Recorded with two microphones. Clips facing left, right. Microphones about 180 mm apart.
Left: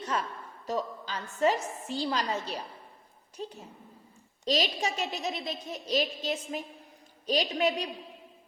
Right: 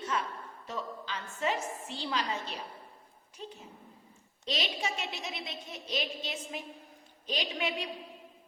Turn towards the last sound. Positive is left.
turn(degrees=40)  # may be behind; listen again after turning